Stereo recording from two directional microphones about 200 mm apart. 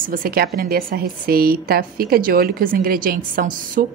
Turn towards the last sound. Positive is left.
turn(degrees=-45)  # may be behind; listen again after turning